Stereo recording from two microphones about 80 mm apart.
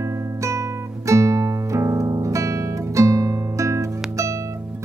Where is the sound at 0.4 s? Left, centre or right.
Right.